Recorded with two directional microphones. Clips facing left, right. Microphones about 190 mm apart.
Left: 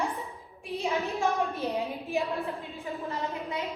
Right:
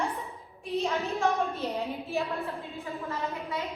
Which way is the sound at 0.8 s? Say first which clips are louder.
Left 1 dB; 15° left (ahead or behind).